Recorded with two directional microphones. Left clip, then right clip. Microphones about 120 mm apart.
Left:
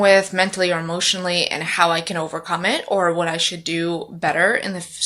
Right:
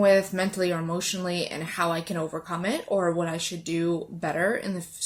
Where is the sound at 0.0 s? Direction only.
35° right (ahead or behind).